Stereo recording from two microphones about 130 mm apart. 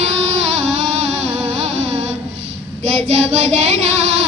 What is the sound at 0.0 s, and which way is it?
Music, 50° right (ahead or behind).